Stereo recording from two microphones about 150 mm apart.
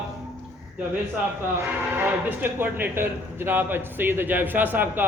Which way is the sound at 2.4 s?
10° right (ahead or behind).